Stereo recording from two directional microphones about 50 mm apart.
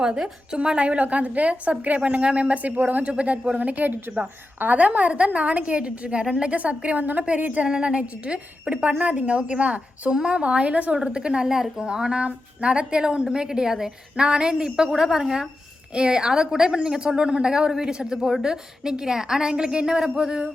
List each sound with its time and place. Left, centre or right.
0.0 s a woman's voice: centre
7.7 s a woman's voice: centre